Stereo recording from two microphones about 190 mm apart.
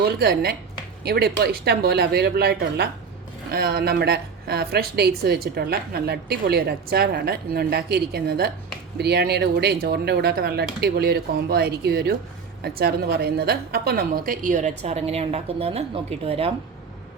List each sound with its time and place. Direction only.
0.0 s a woman's voice: 55° right (ahead or behind); by 16.5 s 30° right (ahead or behind)